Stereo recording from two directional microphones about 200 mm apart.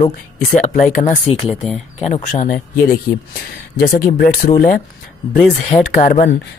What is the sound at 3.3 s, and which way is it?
Speech, 50° left (ahead or behind).